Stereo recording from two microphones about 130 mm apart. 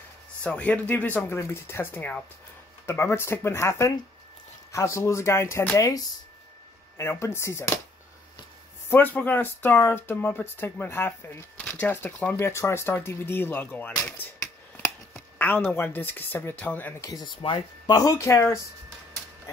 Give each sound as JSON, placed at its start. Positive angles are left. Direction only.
{"t": 0.4, "sound": "speech", "side_deg": 10}
{"t": 8.9, "sound": "speech", "side_deg": 15}
{"t": 17.0, "sound": "speech", "side_deg": 30}
{"t": 17.4, "sound": "speech", "side_deg": 40}